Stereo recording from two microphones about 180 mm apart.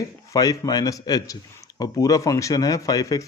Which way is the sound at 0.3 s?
20° left (ahead or behind).